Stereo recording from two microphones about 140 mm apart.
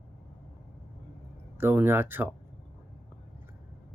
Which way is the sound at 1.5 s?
15° right (ahead or behind).